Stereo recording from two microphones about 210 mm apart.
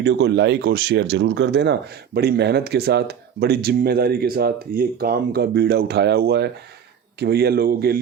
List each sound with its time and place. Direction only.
0.0 s speech: 55° right (ahead or behind)